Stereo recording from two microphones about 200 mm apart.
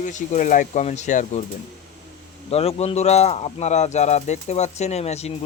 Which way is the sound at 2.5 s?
30° left (ahead or behind).